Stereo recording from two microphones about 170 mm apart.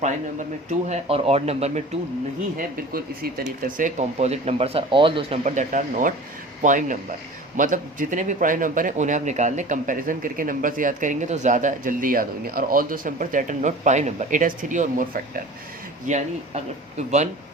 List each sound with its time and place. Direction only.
0.7 s speech: 40° right (ahead or behind)
2.6 s speech: 60° right (ahead or behind); by 5.4 s 30° right (ahead or behind)
5.5 s a man's voice: 45° right (ahead or behind)